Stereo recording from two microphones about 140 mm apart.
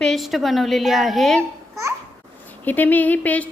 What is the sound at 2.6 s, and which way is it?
Speech, 10° left (ahead or behind).